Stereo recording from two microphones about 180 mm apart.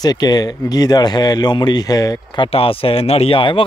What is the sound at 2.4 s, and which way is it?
Speech, 30° left (ahead or behind).